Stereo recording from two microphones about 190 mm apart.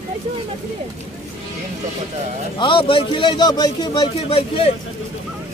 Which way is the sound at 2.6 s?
25° left (ahead or behind).